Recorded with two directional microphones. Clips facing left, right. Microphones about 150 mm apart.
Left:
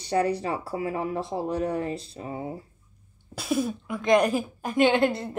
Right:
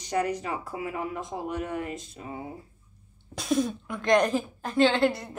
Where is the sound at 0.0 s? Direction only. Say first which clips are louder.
Left 3 dB; 30° left (ahead or behind).